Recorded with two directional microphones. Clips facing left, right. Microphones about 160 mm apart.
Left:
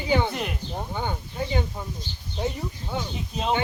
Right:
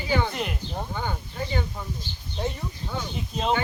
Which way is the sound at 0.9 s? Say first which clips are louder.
Left 1 dB; 15° left (ahead or behind).